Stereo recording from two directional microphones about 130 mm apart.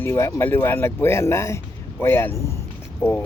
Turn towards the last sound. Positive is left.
turn(degrees=20)  # may be behind; listen again after turning